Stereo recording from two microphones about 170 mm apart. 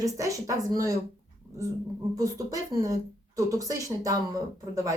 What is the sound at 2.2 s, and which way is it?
Speech, 20° right (ahead or behind).